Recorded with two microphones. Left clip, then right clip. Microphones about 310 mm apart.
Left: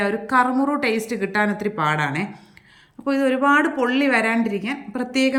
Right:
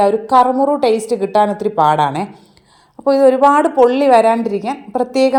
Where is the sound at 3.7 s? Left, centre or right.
Centre.